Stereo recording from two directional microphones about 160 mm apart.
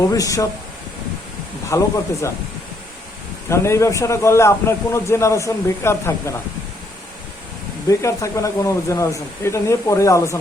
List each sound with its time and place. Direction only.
0.1 s speech: 20° left (ahead or behind)
1.7 s speech: 20° left (ahead or behind)
3.5 s a man's voice: 15° left (ahead or behind)
7.9 s speech: 20° left (ahead or behind)